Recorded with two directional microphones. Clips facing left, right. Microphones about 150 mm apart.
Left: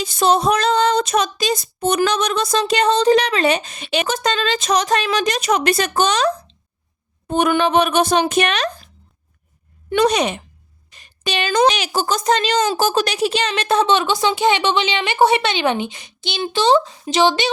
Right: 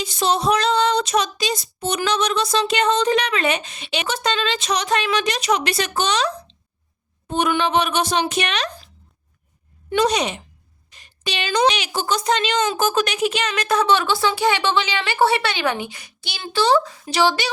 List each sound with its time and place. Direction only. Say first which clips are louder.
0.0 s female singing: left 4 dB; 50° left (ahead or behind)
9.9 s a woman's voice: left 3 dB; 55° left (ahead or behind); by 17.5 s 20° left (ahead or behind)